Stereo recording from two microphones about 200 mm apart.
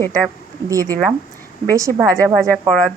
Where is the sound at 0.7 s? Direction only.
15° right (ahead or behind).